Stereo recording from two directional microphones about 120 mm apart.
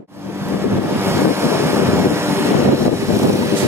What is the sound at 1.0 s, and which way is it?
Vehicle, 20° right (ahead or behind).